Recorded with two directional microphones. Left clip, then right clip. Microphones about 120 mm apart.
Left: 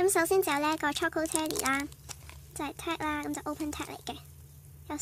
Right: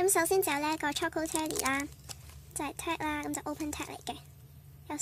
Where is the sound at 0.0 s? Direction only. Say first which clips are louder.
Left 2 dB; 5° left (ahead or behind).